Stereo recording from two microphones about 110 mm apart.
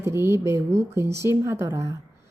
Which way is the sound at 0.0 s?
25° right (ahead or behind).